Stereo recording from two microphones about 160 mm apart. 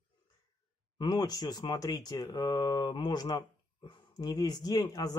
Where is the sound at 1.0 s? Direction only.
25° left (ahead or behind).